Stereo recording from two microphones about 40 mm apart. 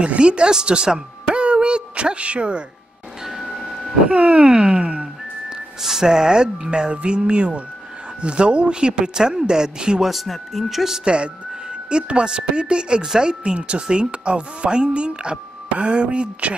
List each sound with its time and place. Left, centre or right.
0.0 s speech: right
3.3 s printer: centre
3.8 s a woman's voice: right
5.8 s a woman's voice: centre
10.0 s speech: centre
11.1 s a woman's voice: right
13.3 s a woman's voice: right